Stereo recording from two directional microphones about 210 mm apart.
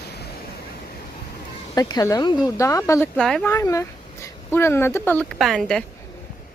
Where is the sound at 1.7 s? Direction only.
20° left (ahead or behind).